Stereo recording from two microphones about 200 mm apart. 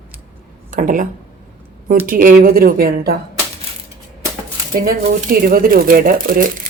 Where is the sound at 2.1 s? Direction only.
45° right (ahead or behind).